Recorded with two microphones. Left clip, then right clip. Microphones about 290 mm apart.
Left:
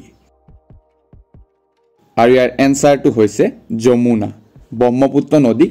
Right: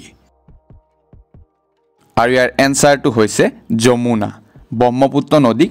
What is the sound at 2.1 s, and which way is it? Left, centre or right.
Speech, right.